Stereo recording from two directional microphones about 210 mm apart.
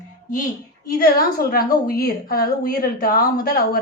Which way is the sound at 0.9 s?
45° left (ahead or behind).